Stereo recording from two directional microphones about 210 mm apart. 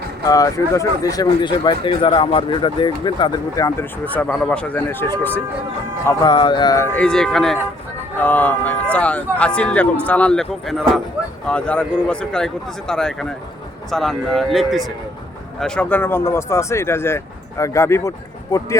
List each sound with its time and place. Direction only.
0.3 s speech: 15° left (ahead or behind)
6.1 s speech: 20° left (ahead or behind)